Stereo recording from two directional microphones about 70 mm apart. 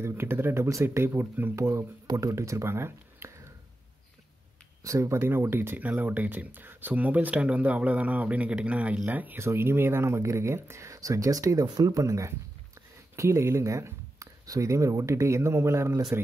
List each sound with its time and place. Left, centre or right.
0.0 s speech: right
4.8 s speech: right
9.4 s speech: right
11.6 s speech: right